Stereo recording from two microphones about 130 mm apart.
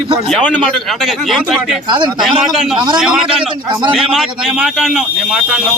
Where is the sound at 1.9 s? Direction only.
35° right (ahead or behind).